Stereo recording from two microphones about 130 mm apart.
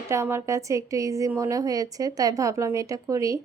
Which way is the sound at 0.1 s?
20° right (ahead or behind).